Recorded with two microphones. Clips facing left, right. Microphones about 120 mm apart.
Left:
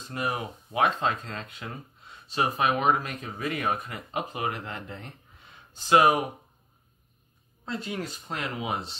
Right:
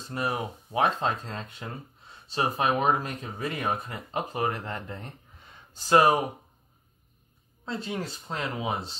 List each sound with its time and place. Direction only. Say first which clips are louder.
0.0 s speech: right 1 dB; 35° right (ahead or behind)
7.6 s speech: even; 25° right (ahead or behind)